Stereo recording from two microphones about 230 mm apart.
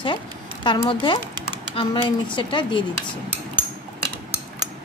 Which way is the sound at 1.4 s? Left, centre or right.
Left.